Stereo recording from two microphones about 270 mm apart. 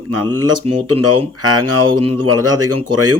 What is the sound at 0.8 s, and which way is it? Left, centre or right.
Speech, right.